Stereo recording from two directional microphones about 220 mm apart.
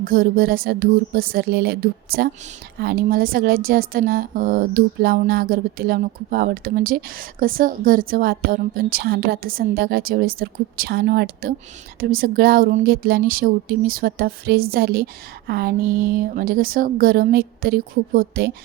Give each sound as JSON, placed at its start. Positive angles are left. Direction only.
{"t": 0.0, "sound": "a woman's voice", "side_deg": -40}